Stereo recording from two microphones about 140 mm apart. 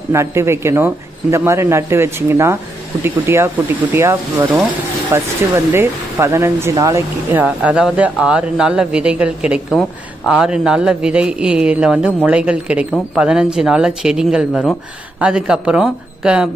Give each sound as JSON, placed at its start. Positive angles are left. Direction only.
{"t": 0.1, "sound": "a man's voice", "side_deg": -20}
{"t": 7.4, "sound": "a man's voice", "side_deg": -5}